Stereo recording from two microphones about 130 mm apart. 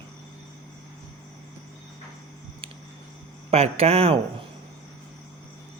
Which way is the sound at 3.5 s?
50° right (ahead or behind).